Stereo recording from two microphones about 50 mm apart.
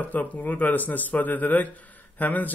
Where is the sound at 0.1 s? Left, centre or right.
Left.